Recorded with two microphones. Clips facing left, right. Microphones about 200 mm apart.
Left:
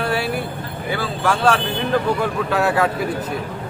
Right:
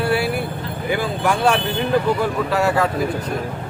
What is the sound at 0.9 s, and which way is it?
Speech, 15° right (ahead or behind).